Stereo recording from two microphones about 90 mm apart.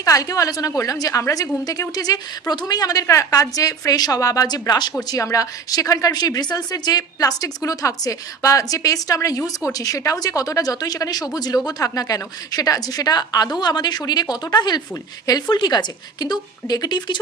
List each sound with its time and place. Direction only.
0.0 s a woman's voice: 40° left (ahead or behind)